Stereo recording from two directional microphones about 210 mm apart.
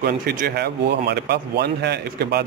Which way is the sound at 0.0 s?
45° right (ahead or behind).